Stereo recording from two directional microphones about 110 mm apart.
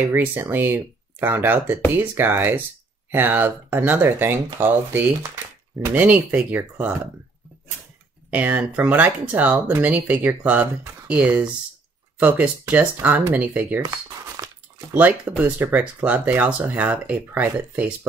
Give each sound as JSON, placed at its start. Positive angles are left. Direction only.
{"t": 0.1, "sound": "speech", "side_deg": -20}
{"t": 8.3, "sound": "speech", "side_deg": -10}
{"t": 14.4, "sound": "a sound", "side_deg": -35}
{"t": 14.9, "sound": "speech", "side_deg": -15}